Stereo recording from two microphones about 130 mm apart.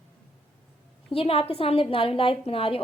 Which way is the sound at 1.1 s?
45° left (ahead or behind).